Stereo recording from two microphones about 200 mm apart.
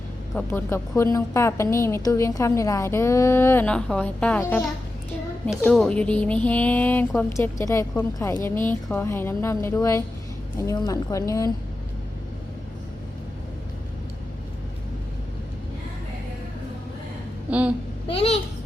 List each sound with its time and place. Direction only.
0.3 s a woman's voice: 10° left (ahead or behind)
5.6 s a woman's voice: 5° left (ahead or behind)
17.5 s a woman's voice: 5° right (ahead or behind)